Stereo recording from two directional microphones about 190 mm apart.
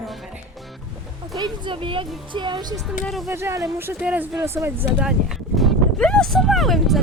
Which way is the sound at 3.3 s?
15° right (ahead or behind).